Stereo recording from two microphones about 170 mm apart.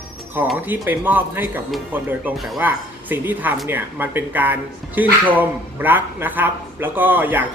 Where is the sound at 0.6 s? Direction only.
10° right (ahead or behind).